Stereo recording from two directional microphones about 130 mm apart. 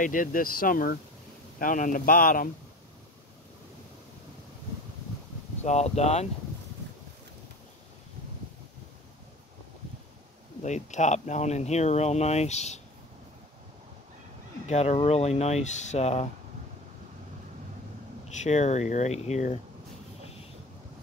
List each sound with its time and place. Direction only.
0.0 s speech: 90° left
5.6 s speech: 60° left (ahead or behind)
10.6 s speech: 65° left (ahead or behind)
14.7 s speech: 60° left (ahead or behind)
18.4 s speech: 60° left (ahead or behind)